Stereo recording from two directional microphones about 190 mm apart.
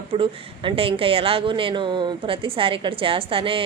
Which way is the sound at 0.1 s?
30° right (ahead or behind).